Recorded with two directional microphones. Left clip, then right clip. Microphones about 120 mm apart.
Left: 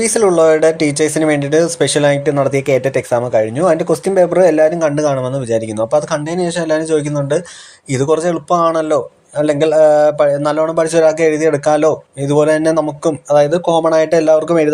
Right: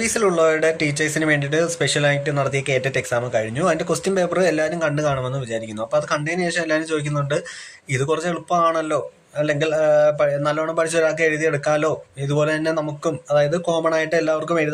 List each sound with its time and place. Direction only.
0.0 s speech: 40° left (ahead or behind)